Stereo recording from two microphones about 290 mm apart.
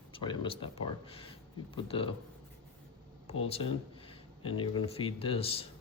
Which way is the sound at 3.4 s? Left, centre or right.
Centre.